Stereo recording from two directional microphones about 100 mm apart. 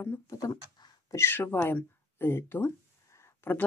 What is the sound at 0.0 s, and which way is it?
Speech, 30° left (ahead or behind).